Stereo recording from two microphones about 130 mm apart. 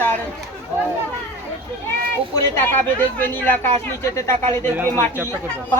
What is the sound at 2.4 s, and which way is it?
A man's voice, 15° left (ahead or behind).